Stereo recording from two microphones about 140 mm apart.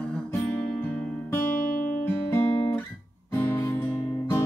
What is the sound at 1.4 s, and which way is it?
Music, 90° left.